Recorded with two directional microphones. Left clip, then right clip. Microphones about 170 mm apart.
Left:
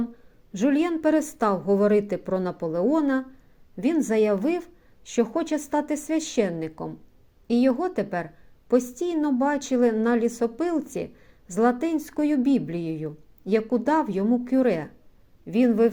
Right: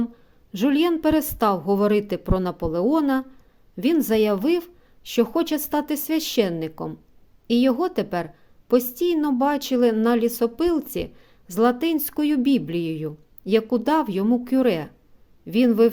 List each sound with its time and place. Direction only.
0.5 s a woman's voice: 30° right (ahead or behind)